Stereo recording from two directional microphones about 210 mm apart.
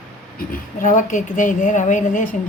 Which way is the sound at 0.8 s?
35° left (ahead or behind).